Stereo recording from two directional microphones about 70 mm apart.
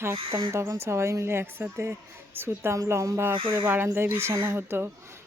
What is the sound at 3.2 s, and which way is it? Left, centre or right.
Speech, right.